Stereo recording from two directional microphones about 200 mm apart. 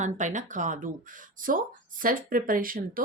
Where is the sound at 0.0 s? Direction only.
40° right (ahead or behind).